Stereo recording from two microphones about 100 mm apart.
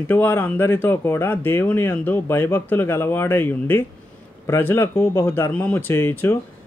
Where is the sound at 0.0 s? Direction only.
20° left (ahead or behind).